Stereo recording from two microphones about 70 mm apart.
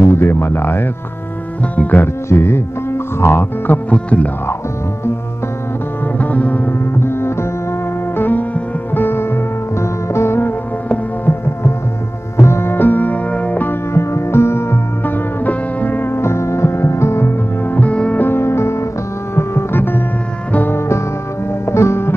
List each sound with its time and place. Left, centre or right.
0.0 s speech: left
1.6 s speech: left
2.2 s speech: left; by 4.3 s centre
6.1 s music: left
8.2 s music: left
12.4 s music: left
13.9 s music: left
17.6 s music: left
18.2 s music: left